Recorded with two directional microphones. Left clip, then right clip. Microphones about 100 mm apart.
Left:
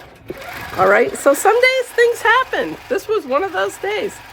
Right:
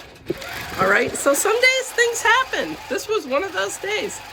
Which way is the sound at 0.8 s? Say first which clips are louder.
Left 5 dB; 30° left (ahead or behind).